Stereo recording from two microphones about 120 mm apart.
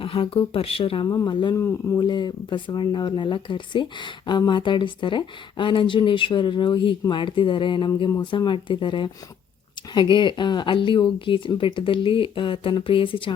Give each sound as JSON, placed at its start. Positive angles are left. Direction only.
{"t": 0.0, "sound": "speech", "side_deg": 50}
{"t": 1.0, "sound": "speech", "side_deg": 30}